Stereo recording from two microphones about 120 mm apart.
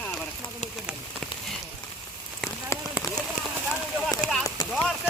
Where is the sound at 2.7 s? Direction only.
25° left (ahead or behind).